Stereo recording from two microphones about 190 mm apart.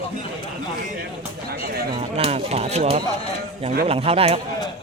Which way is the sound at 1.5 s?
50° right (ahead or behind).